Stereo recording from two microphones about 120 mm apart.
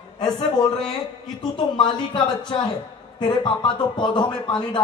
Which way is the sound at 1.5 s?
40° left (ahead or behind).